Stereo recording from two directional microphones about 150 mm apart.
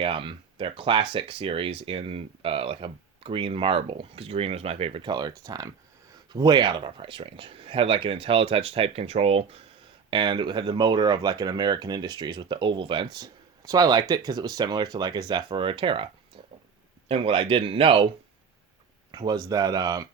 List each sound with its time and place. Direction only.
0.0 s speech: 35° right (ahead or behind)
10.1 s speech: 30° right (ahead or behind)
17.1 s speech: 35° right (ahead or behind)
19.1 s speech: 25° right (ahead or behind)